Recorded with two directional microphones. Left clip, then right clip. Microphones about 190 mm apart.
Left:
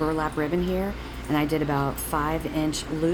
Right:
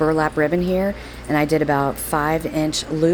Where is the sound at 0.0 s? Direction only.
25° right (ahead or behind).